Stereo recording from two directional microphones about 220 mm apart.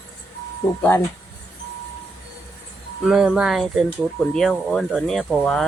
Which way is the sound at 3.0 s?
Centre (ahead or behind).